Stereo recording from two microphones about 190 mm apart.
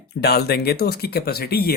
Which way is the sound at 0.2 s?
60° left (ahead or behind).